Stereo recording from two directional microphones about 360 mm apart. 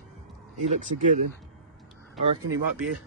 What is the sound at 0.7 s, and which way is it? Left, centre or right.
Speech, centre.